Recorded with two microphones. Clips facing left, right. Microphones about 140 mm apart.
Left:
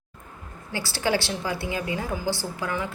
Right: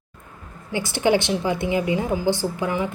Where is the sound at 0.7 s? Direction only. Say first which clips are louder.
Right 6 dB; 20° right (ahead or behind).